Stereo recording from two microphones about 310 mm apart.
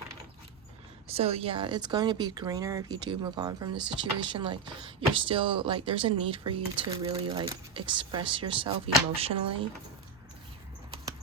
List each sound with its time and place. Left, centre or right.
1.0 s speech: centre